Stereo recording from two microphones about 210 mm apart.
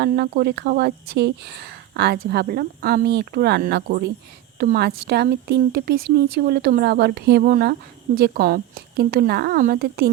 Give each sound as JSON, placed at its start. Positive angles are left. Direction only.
{"t": 0.0, "sound": "a woman's voice", "side_deg": -50}